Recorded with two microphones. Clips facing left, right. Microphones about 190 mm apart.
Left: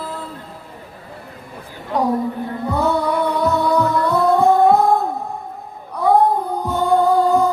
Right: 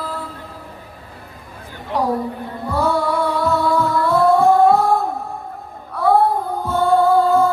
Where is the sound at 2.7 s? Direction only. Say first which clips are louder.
Even; 20° left (ahead or behind).